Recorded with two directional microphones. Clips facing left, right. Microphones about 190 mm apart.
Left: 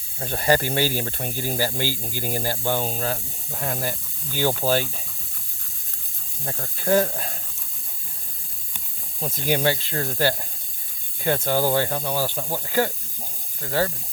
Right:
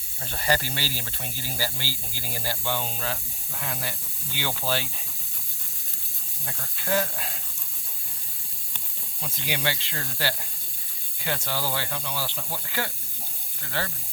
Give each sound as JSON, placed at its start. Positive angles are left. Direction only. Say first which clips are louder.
{"t": 0.2, "sound": "speech", "louder": "left 6 dB", "side_deg": 45}
{"t": 6.4, "sound": "speech", "louder": "left 8 dB", "side_deg": 35}
{"t": 9.2, "sound": "speech", "louder": "left 8 dB", "side_deg": 45}